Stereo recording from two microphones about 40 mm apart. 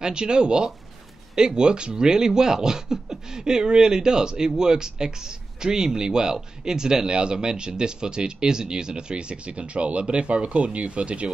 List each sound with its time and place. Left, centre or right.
0.0 s speech: right